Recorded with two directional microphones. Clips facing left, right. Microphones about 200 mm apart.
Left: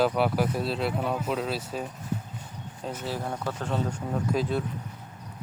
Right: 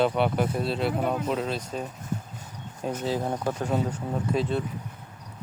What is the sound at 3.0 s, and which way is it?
Speech, 15° right (ahead or behind).